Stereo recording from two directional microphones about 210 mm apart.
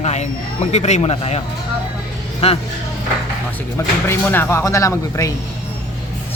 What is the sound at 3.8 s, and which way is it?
Speech, 10° left (ahead or behind).